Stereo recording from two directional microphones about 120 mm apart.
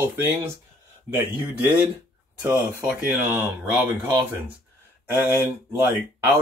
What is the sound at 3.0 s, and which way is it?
Speech, 15° right (ahead or behind).